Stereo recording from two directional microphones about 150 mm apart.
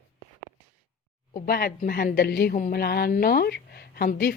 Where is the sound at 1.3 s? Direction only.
80° left.